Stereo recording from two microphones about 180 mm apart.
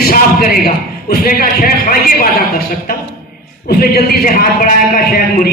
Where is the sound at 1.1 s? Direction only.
55° left (ahead or behind).